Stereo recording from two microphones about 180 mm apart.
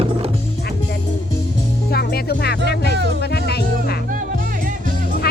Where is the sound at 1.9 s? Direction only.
60° left (ahead or behind).